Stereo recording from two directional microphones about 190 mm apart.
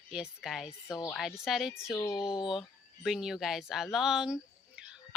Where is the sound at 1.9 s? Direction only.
20° left (ahead or behind).